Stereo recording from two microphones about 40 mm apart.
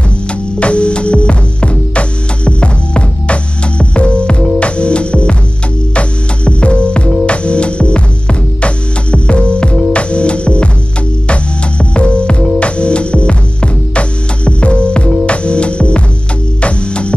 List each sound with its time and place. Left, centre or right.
0.6 s music: left
11.8 s music: left